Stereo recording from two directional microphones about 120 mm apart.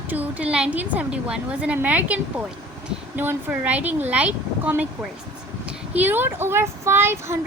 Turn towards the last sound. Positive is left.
turn(degrees=-20)  # may be behind; listen again after turning